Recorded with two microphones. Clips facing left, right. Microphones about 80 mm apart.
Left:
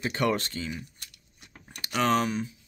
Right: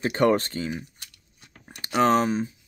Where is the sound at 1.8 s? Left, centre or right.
Right.